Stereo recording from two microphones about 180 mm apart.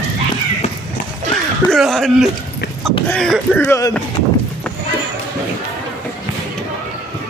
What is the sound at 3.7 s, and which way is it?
Speech, 20° left (ahead or behind).